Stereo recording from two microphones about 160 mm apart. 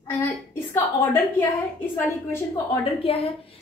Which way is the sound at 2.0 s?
15° left (ahead or behind).